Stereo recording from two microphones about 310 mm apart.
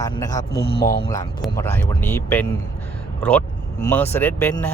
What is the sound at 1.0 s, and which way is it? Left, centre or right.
Speech, centre.